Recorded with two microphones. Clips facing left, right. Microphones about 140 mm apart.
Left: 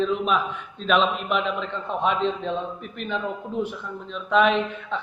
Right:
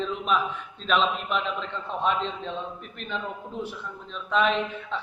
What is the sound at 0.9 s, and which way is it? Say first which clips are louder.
Speech: left 3 dB; 55° left (ahead or behind).